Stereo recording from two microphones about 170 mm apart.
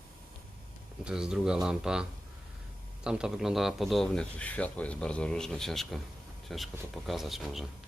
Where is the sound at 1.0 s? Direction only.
5° right (ahead or behind).